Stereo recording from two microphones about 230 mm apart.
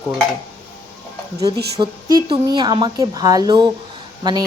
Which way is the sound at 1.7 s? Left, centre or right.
Centre.